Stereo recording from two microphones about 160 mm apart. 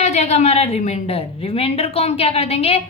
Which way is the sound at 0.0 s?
45° left (ahead or behind).